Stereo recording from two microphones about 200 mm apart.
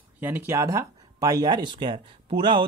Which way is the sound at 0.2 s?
10° right (ahead or behind).